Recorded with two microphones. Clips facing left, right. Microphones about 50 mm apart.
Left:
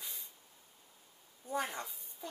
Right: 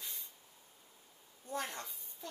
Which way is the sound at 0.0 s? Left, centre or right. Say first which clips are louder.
Even; centre.